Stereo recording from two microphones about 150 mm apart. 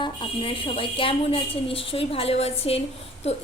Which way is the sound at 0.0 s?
35° left (ahead or behind).